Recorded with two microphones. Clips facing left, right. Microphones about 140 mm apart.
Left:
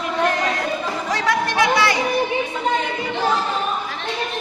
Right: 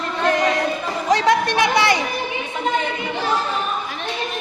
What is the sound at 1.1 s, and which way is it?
Music, 20° right (ahead or behind).